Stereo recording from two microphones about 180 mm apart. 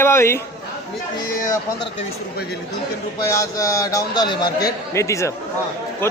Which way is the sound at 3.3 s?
20° left (ahead or behind).